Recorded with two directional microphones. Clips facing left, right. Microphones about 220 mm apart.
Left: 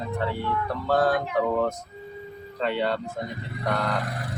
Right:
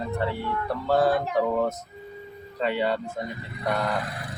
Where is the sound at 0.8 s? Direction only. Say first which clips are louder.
Right 1 dB; 10° right (ahead or behind).